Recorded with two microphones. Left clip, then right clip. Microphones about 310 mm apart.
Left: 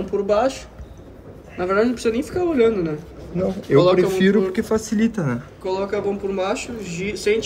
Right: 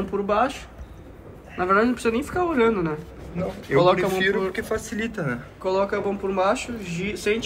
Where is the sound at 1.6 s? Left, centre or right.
Centre.